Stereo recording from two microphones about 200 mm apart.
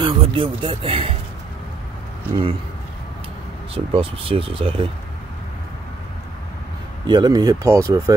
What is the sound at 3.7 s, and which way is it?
Speech, 30° right (ahead or behind).